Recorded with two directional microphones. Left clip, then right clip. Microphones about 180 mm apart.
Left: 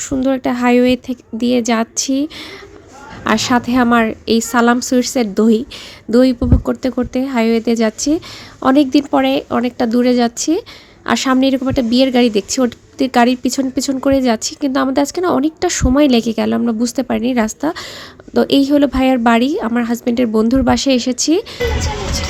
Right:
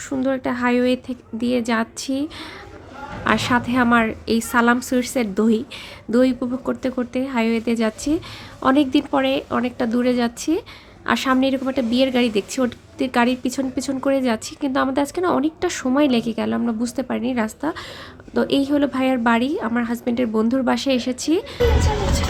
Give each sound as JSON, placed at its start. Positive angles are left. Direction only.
{"t": 0.0, "sound": "a woman's voice", "side_deg": 25}
{"t": 3.2, "sound": "a woman's voice", "side_deg": 25}